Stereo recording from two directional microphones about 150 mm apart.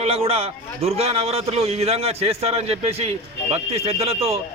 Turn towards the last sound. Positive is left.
turn(degrees=-40)  # may be behind; listen again after turning